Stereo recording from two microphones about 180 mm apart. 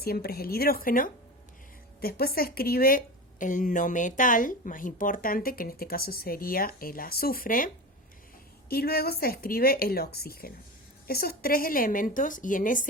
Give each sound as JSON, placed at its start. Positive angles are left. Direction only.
{"t": 0.0, "sound": "a woman's voice", "side_deg": 60}
{"t": 8.7, "sound": "a woman's voice", "side_deg": 60}